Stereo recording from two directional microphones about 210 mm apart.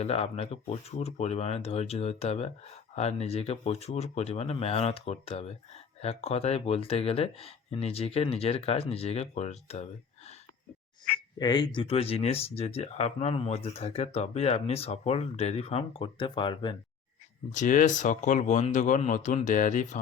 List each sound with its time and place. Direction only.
0.0 s speech: 30° left (ahead or behind)
11.3 s speech: 20° left (ahead or behind)
17.5 s speech: 35° left (ahead or behind)